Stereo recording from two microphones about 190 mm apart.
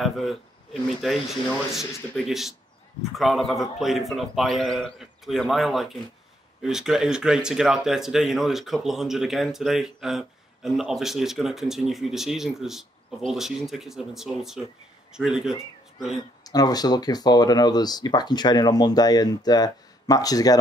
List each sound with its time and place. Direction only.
0.0 s speech: centre (ahead or behind)
16.4 s speech: 20° left (ahead or behind)